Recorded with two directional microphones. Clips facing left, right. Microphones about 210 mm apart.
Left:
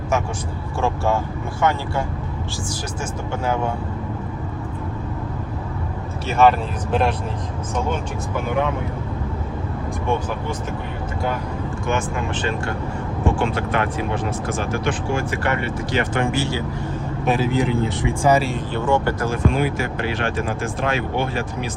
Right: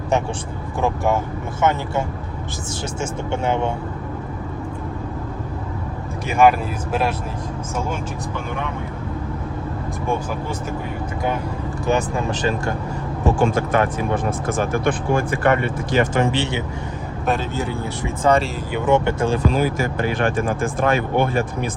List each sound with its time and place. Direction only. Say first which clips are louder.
0.8 s speech: right 1 dB; 15° right (ahead or behind)
3.0 s speech: right 3 dB; 25° right (ahead or behind)
6.2 s speech: right 1 dB; 15° right (ahead or behind)
11.9 s speech: right 4 dB; 35° right (ahead or behind)
17.2 s speech: left 2 dB; centre (ahead or behind)
17.5 s speech: left 5 dB; 15° left (ahead or behind)
18.7 s speech: right 3 dB; 20° right (ahead or behind)
19.5 s speech: right 1 dB; 40° right (ahead or behind)